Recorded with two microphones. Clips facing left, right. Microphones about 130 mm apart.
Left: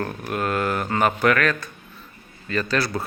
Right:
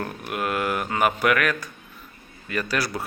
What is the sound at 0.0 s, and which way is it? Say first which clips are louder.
Speech: left 2 dB; 5° right (ahead or behind).